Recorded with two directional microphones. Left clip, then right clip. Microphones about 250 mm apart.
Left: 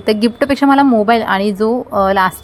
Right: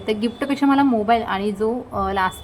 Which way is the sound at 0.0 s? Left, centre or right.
Left.